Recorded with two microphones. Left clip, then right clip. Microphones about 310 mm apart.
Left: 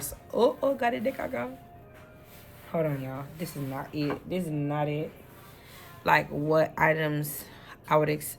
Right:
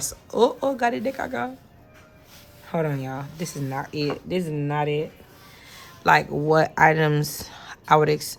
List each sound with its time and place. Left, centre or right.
0.3 s speech: centre
2.7 s speech: centre